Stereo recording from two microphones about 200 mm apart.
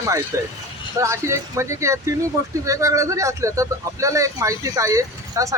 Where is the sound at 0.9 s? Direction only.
15° right (ahead or behind).